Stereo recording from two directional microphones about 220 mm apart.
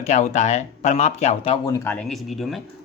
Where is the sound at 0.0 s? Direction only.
30° left (ahead or behind).